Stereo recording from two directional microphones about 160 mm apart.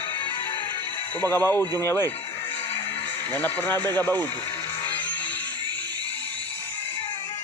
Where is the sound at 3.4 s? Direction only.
10° left (ahead or behind).